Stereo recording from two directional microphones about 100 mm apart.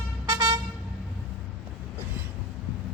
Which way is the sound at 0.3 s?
40° right (ahead or behind).